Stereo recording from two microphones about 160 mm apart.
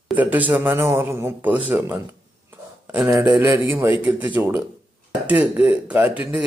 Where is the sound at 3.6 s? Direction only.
10° right (ahead or behind).